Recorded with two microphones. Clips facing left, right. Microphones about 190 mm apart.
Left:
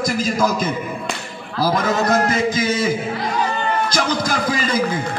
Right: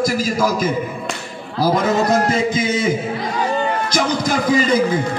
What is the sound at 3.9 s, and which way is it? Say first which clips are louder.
Speech: right 2 dB; 20° right (ahead or behind).